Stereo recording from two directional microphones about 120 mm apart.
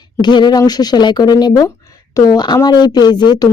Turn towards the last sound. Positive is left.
turn(degrees=35)  # may be behind; listen again after turning